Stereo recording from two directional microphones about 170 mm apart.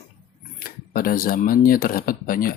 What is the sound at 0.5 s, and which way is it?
Speech, 60° left (ahead or behind).